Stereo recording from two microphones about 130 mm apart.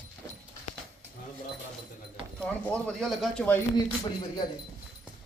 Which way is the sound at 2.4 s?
5° left (ahead or behind).